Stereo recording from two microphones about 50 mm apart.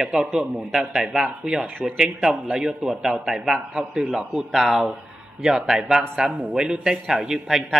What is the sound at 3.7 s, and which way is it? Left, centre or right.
A man's voice, right.